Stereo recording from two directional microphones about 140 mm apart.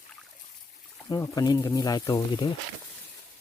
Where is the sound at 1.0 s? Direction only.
25° left (ahead or behind).